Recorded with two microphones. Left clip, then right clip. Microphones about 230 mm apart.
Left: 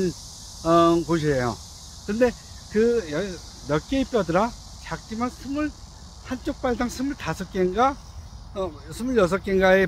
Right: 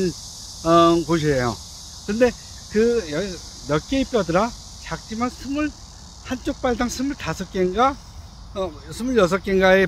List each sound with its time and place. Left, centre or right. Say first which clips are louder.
0.6 s speech: right 3 dB; centre